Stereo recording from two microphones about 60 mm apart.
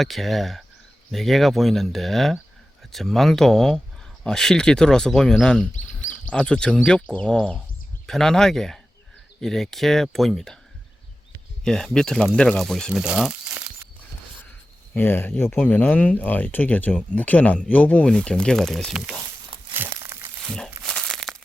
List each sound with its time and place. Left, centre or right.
0.0 s speech: centre
11.6 s speech: centre
12.5 s speech: centre
14.9 s speech: left; by 18.9 s centre
19.9 s crumpling: right
20.5 s crumpling: centre